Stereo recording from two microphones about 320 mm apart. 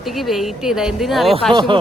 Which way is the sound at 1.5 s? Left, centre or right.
Centre.